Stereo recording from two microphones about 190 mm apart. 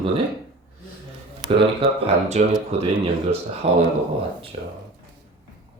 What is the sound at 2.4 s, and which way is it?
Speech, 35° right (ahead or behind).